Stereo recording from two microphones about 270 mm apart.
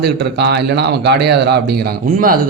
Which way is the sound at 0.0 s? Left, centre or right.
Right.